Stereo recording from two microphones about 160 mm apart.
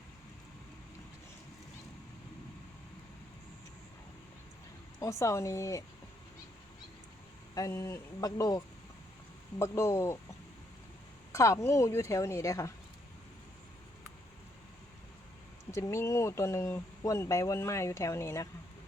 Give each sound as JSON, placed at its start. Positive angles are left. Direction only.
{"t": 4.9, "sound": "speech", "side_deg": 20}
{"t": 7.5, "sound": "speech", "side_deg": 20}
{"t": 11.3, "sound": "speech", "side_deg": 20}
{"t": 15.7, "sound": "speech", "side_deg": 20}